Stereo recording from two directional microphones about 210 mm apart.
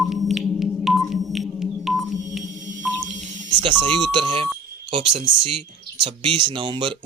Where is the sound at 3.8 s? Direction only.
20° right (ahead or behind).